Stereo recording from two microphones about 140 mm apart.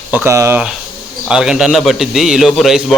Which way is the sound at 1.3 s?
5° right (ahead or behind).